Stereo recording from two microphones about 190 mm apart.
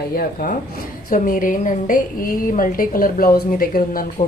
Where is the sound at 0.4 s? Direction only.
55° left (ahead or behind).